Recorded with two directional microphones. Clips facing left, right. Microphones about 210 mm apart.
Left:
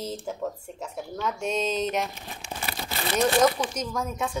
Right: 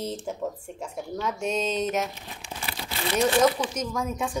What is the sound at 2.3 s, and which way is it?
Crumpling, 45° left (ahead or behind).